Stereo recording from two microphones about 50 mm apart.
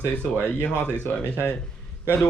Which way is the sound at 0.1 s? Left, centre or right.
Left.